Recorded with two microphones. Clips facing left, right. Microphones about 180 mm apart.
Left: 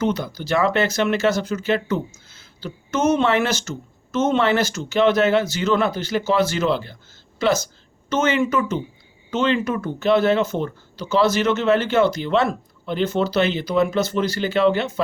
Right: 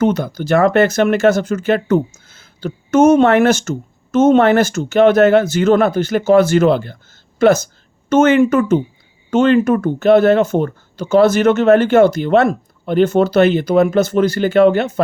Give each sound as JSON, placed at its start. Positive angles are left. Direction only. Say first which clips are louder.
{"t": 0.0, "sound": "speech", "louder": "right 7 dB", "side_deg": -55}